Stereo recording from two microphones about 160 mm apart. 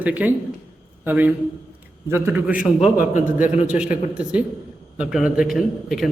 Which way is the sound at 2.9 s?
55° left (ahead or behind).